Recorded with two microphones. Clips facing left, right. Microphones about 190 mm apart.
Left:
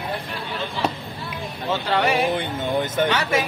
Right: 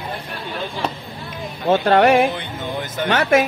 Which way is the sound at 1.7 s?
50° right (ahead or behind).